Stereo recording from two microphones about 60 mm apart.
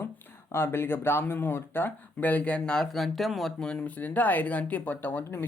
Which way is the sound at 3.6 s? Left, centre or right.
Centre.